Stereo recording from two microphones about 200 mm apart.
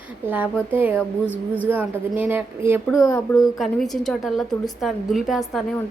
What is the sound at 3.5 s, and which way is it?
A woman's voice, centre (ahead or behind).